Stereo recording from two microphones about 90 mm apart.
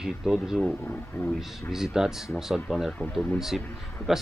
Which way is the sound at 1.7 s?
5° right (ahead or behind).